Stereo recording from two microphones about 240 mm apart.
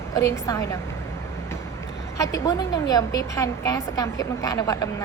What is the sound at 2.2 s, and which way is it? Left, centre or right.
A woman's voice, centre.